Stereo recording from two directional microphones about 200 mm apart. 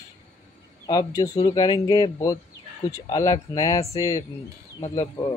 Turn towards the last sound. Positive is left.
turn(degrees=20)  # may be behind; listen again after turning